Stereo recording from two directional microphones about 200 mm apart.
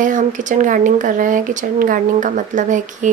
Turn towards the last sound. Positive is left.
turn(degrees=-40)  # may be behind; listen again after turning